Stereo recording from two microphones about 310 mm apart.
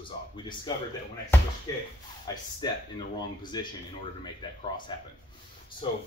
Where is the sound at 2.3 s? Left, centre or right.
Centre.